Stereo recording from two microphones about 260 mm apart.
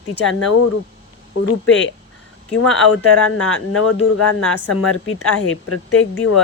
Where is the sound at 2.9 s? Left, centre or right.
Left.